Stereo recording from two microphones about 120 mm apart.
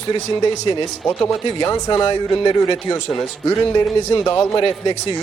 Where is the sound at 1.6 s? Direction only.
25° left (ahead or behind).